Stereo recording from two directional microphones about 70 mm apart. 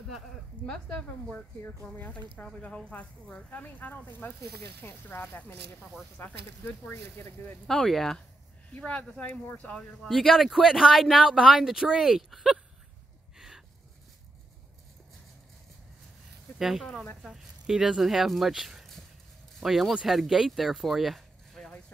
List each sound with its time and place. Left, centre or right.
0.7 s speech: centre; by 7.5 s left
7.6 s speech: centre
8.7 s speech: centre
10.0 s speech: centre
16.5 s speech: centre